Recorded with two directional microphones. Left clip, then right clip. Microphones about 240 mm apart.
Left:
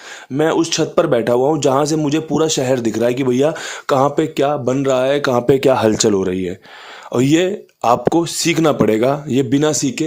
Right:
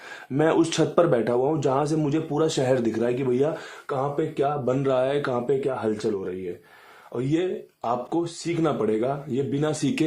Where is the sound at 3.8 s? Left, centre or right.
Left.